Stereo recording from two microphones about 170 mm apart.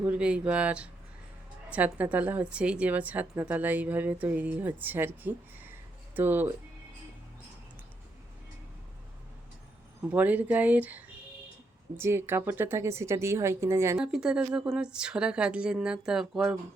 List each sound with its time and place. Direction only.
0.0 s a woman's voice: 5° right (ahead or behind)
10.1 s a woman's voice: 10° right (ahead or behind)
14.0 s speech: 5° right (ahead or behind)